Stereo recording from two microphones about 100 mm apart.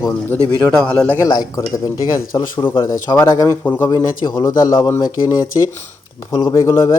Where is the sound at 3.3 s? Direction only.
35° left (ahead or behind).